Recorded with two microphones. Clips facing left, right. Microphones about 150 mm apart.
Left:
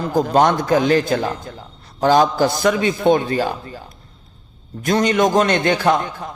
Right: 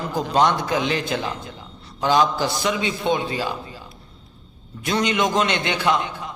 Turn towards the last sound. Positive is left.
turn(degrees=45)  # may be behind; listen again after turning